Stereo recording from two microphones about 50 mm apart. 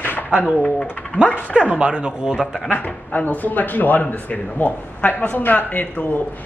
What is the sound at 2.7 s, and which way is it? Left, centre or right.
A man's voice, left.